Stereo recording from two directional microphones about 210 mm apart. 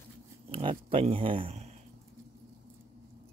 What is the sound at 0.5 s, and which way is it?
Speech, 25° right (ahead or behind).